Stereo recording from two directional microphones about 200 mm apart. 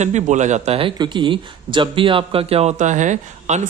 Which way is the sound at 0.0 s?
35° right (ahead or behind).